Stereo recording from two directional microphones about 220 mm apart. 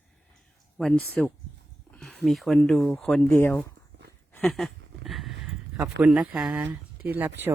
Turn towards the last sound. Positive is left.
turn(degrees=-10)  # may be behind; listen again after turning